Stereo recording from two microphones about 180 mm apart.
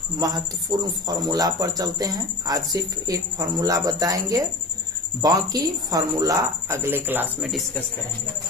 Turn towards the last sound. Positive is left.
turn(degrees=0)  # may be behind; listen again after turning